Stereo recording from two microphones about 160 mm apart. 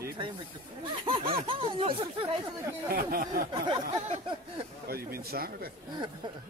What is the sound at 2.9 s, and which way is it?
Speech, 65° right (ahead or behind).